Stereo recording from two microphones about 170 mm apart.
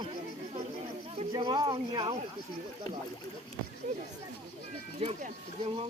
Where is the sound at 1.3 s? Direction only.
25° right (ahead or behind).